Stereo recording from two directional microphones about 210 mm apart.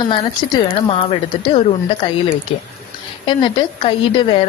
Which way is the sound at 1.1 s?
25° left (ahead or behind).